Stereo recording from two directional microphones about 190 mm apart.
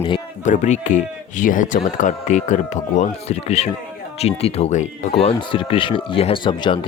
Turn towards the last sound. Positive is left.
turn(degrees=25)  # may be behind; listen again after turning